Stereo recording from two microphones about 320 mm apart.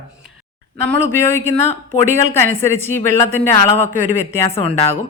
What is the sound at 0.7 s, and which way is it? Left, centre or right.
Speech, centre.